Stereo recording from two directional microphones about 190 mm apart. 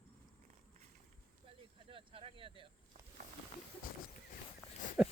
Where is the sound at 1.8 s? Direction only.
30° right (ahead or behind).